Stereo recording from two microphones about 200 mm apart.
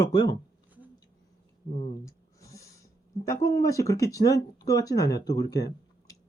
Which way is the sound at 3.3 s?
15° left (ahead or behind).